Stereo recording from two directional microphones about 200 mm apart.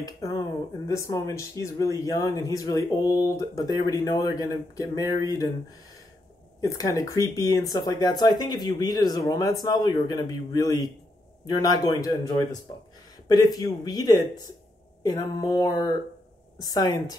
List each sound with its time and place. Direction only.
0.0 s speech: 15° left (ahead or behind)
6.6 s speech: 15° left (ahead or behind)